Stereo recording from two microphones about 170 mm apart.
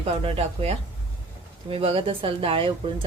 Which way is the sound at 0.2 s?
35° right (ahead or behind).